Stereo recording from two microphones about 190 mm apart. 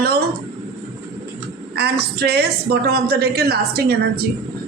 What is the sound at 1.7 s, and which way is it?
A woman's voice, 55° right (ahead or behind).